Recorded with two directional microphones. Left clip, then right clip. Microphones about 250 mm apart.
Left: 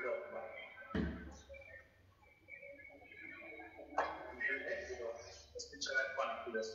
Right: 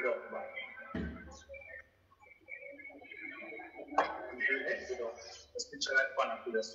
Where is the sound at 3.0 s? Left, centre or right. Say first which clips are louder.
Right 6 dB; right.